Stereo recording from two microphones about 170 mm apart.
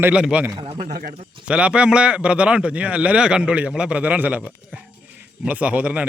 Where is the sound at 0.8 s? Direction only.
55° right (ahead or behind).